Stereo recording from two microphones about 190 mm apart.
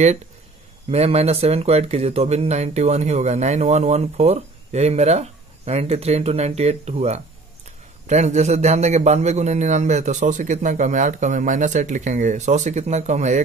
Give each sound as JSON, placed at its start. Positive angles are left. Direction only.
{"t": 0.9, "sound": "speech", "side_deg": -35}